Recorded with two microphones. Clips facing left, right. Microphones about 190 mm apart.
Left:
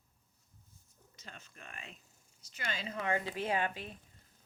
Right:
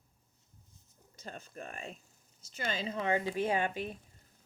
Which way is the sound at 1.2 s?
50° right (ahead or behind).